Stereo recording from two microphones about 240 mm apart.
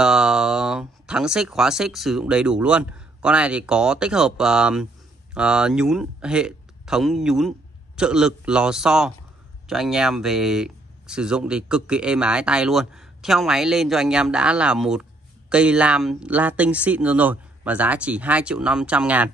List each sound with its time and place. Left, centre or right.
0.0 s speech: centre